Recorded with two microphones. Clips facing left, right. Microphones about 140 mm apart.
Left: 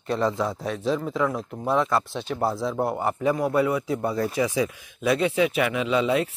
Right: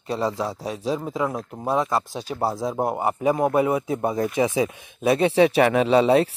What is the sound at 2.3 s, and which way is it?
Speech, 15° right (ahead or behind).